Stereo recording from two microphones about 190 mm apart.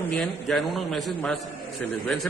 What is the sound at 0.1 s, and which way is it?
A man's voice, centre (ahead or behind).